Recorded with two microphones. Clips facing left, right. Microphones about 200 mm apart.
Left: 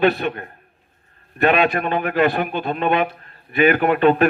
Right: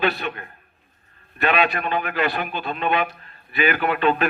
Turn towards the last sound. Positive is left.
turn(degrees=50)  # may be behind; listen again after turning